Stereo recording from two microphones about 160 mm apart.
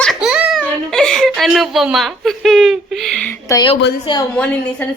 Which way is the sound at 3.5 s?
25° left (ahead or behind).